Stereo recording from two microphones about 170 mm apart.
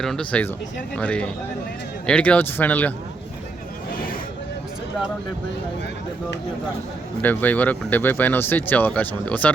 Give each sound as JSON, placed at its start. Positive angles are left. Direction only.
{"t": 0.0, "sound": "speech", "side_deg": 5}
{"t": 7.2, "sound": "speech", "side_deg": 10}